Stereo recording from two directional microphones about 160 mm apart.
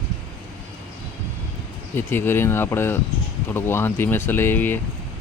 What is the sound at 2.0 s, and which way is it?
Speech, 15° left (ahead or behind).